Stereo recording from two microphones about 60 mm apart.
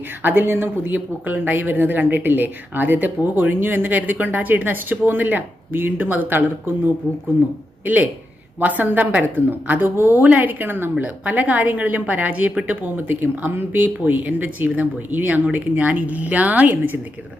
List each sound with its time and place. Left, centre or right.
0.2 s speech: right
8.5 s a woman's voice: right